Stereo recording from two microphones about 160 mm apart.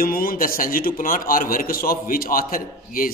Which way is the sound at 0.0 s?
65° left (ahead or behind).